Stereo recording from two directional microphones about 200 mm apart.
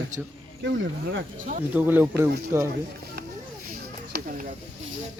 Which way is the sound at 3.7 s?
45° right (ahead or behind).